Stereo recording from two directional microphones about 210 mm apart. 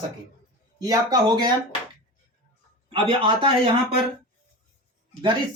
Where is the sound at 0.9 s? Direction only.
20° right (ahead or behind).